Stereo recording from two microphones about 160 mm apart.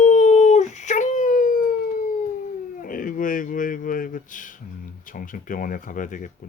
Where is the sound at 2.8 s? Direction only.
60° left (ahead or behind).